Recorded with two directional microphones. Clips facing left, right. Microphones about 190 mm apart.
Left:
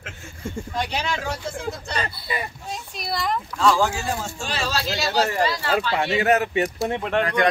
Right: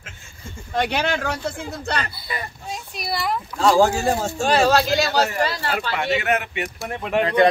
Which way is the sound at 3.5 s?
40° right (ahead or behind).